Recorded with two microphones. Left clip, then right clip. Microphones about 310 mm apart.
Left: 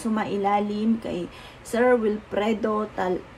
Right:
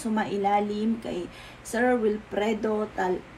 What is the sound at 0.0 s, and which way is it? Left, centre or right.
Speech, left.